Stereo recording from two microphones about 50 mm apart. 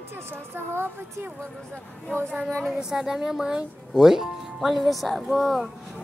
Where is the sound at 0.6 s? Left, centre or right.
Right.